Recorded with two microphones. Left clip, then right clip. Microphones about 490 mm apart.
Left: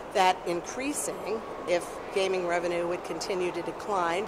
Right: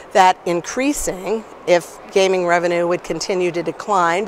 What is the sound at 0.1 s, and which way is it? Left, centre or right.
Speech, right.